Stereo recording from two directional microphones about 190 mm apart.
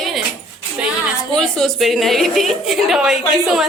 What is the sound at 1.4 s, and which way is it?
Speech, 5° left (ahead or behind).